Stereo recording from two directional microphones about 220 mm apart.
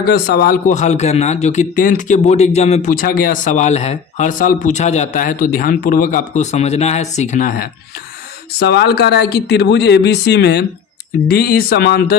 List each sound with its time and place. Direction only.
0.1 s a man's voice: 45° left (ahead or behind)